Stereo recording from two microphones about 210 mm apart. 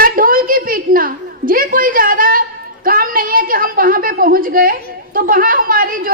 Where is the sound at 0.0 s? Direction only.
40° right (ahead or behind).